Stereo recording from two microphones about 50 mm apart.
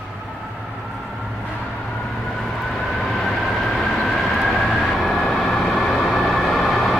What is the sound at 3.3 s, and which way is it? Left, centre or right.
Vehicle, centre.